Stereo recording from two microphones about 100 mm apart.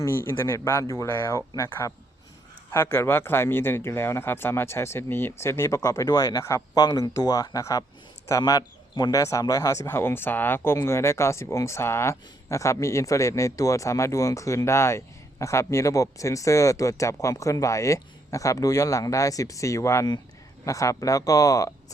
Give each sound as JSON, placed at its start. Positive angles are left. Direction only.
{"t": 0.0, "sound": "a man's voice", "side_deg": 25}